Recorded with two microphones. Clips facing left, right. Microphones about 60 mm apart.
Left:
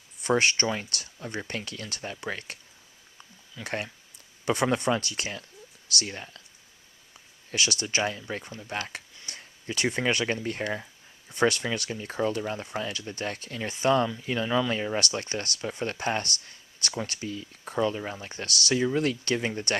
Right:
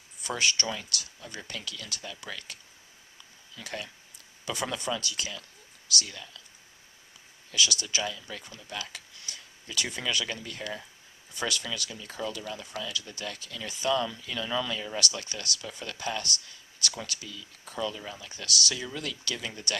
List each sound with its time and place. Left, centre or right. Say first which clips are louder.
0.2 s speech: left 6 dB; left
3.6 s speech: left 5 dB; left
7.5 s speech: left 1 dB; left